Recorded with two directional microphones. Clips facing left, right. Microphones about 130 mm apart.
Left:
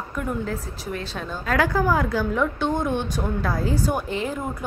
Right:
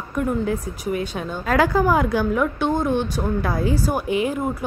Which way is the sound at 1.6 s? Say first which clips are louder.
Right 3 dB; 20° right (ahead or behind).